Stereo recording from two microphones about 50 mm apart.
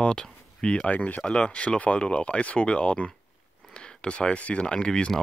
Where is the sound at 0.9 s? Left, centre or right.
Left.